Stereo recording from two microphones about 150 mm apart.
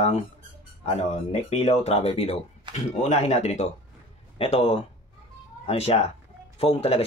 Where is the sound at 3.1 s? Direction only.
45° left (ahead or behind).